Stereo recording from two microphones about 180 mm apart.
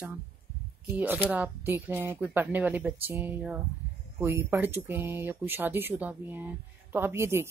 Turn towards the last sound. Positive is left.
turn(degrees=-15)  # may be behind; listen again after turning